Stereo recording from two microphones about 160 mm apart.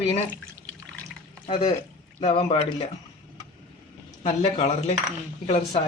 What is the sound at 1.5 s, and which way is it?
Speech, 30° left (ahead or behind).